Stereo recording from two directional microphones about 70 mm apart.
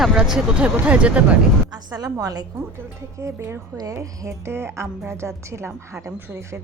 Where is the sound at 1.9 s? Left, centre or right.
Right.